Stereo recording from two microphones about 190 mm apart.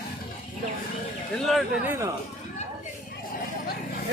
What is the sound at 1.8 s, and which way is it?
Speech, 10° right (ahead or behind).